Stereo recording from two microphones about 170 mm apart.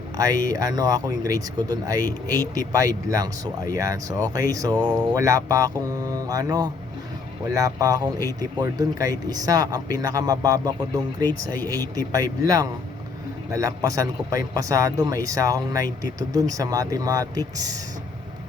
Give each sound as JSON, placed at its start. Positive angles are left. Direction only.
{"t": 0.2, "sound": "a man's voice", "side_deg": -20}